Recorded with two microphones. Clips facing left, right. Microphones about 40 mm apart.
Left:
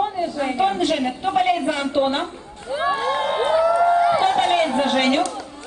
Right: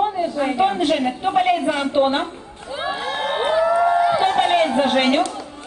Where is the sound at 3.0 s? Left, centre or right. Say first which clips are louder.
Left 3 dB; centre.